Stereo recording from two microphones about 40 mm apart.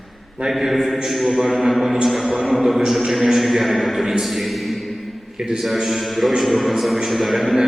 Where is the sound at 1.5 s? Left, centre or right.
Centre.